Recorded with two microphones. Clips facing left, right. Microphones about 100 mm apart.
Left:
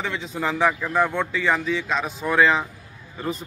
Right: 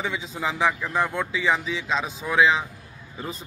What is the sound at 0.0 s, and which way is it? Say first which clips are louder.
A man's voice: left 2 dB; 5° right (ahead or behind).